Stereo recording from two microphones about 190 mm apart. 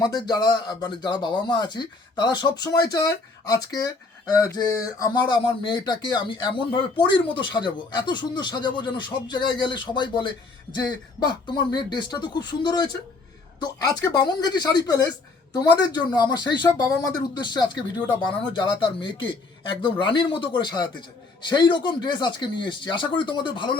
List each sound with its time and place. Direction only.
0.0 s speech: 20° left (ahead or behind)
18.8 s speech: 25° left (ahead or behind)